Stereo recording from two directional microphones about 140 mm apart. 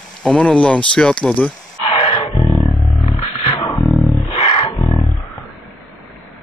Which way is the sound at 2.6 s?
Centre (ahead or behind).